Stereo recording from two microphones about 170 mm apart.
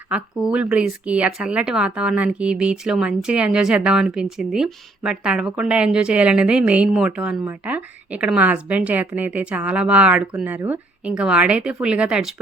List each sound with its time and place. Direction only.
0.1 s speech: 5° right (ahead or behind)